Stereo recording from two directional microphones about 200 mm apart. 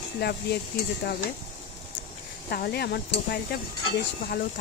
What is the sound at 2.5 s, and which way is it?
Speech, 50° left (ahead or behind).